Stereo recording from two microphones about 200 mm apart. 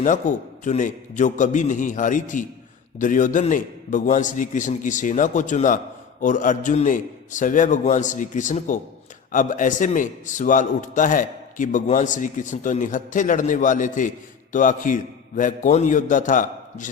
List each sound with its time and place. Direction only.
0.0 s a man's voice: 40° left (ahead or behind)